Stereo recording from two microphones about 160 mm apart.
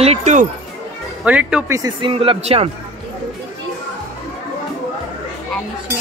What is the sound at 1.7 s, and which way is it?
Speech, 25° right (ahead or behind).